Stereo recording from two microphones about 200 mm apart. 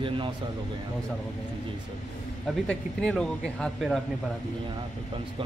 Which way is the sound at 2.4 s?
5° left (ahead or behind).